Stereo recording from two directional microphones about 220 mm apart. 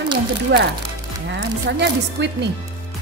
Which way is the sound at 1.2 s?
50° right (ahead or behind).